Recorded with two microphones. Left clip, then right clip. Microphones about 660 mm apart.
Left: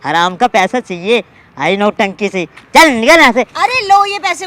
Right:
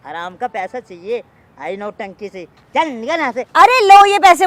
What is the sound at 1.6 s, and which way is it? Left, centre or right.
Speech, left.